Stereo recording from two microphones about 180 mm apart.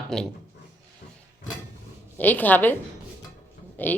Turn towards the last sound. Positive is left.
turn(degrees=10)  # may be behind; listen again after turning